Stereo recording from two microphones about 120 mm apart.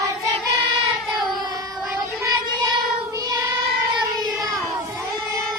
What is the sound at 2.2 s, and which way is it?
Child singing, 25° right (ahead or behind).